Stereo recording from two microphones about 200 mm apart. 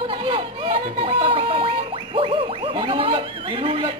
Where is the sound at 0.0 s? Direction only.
25° right (ahead or behind).